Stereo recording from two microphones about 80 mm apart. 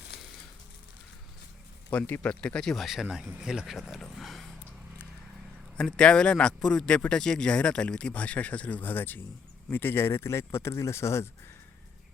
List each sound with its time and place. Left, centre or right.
1.9 s speech: left
2.3 s speech: centre
5.7 s speech: centre; by 11.3 s left